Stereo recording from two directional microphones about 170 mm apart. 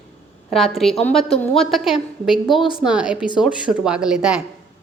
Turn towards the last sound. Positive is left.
turn(degrees=-5)  # may be behind; listen again after turning